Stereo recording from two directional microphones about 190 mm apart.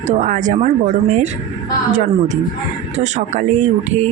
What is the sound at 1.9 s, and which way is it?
A woman's voice, 40° right (ahead or behind).